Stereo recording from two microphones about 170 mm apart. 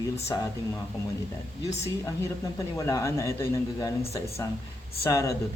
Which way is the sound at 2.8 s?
20° left (ahead or behind).